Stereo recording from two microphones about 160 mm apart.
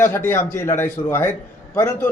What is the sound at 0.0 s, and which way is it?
A man's voice, 15° left (ahead or behind).